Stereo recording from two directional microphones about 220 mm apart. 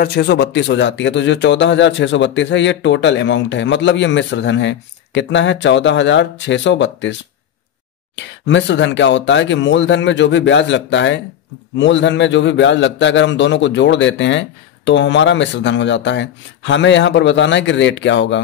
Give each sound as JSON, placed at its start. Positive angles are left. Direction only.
{"t": 0.0, "sound": "a man's voice", "side_deg": 45}
{"t": 8.2, "sound": "a man's voice", "side_deg": 55}